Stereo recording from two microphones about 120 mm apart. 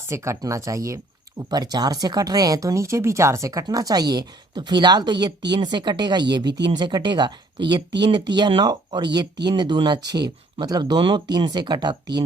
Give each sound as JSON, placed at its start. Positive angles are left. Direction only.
{"t": 0.1, "sound": "speech", "side_deg": -25}